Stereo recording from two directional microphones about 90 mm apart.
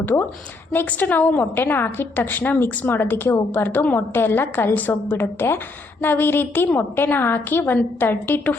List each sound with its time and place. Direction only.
0.0 s a woman's voice: 20° left (ahead or behind)